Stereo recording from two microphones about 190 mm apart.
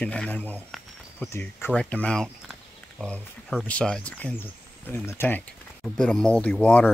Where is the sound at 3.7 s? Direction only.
5° left (ahead or behind).